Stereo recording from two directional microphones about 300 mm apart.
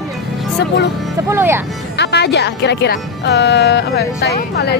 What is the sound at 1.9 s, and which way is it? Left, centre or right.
Speech, left.